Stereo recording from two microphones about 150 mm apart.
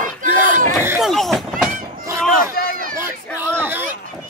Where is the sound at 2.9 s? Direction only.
15° right (ahead or behind).